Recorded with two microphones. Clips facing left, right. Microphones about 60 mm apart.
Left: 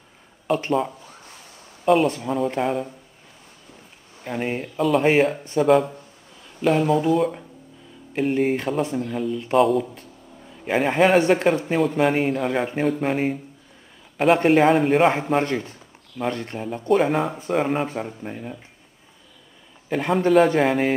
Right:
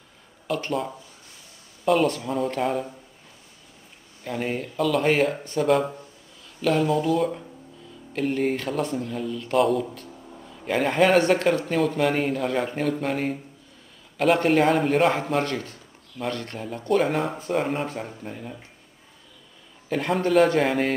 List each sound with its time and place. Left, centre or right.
0.5 s speech: left
1.9 s speech: centre
4.2 s speech: centre
8.1 s speech: centre
9.6 s speech: centre
17.0 s speech: centre
18.2 s speech: centre
19.9 s speech: centre